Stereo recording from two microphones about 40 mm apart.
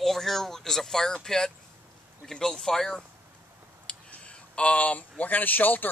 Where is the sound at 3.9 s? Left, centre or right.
Left.